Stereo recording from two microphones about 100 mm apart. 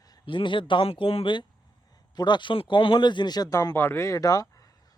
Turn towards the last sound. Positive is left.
turn(degrees=35)  # may be behind; listen again after turning